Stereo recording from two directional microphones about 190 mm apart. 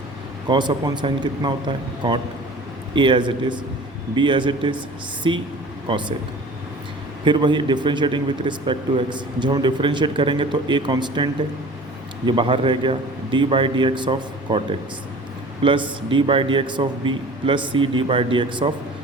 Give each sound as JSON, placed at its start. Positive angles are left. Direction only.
{"t": 0.4, "sound": "a man's voice", "side_deg": -25}
{"t": 7.3, "sound": "a man's voice", "side_deg": -25}